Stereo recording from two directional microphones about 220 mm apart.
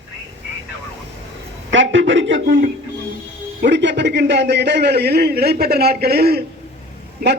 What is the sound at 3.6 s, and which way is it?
A man's voice, 55° right (ahead or behind).